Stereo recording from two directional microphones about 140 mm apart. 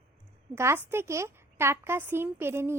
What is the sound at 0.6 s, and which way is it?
A woman's voice, 20° right (ahead or behind).